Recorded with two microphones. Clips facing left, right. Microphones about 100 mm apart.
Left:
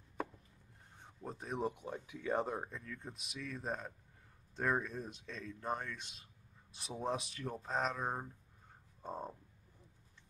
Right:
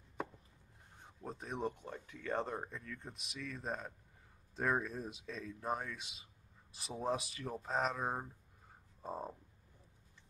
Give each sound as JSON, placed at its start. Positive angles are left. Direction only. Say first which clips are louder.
{"t": 0.9, "sound": "speech", "louder": "even", "side_deg": 0}